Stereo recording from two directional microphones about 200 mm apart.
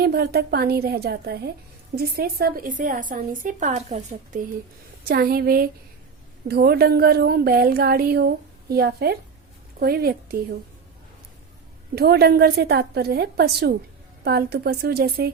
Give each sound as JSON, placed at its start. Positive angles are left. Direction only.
{"t": 0.0, "sound": "a woman's voice", "side_deg": -50}
{"t": 5.0, "sound": "a woman's voice", "side_deg": -50}
{"t": 11.9, "sound": "a woman's voice", "side_deg": -50}